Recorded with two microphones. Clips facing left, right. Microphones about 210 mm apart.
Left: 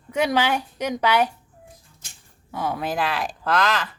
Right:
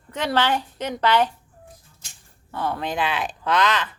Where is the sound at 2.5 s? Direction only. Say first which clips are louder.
Even; 10° left (ahead or behind).